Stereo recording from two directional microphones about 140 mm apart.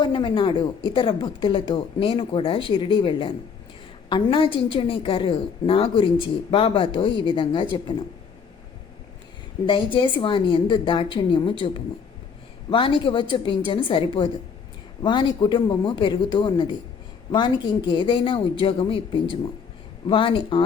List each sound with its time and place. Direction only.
0.0 s a woman's voice: 35° left (ahead or behind)
9.6 s a woman's voice: 35° left (ahead or behind)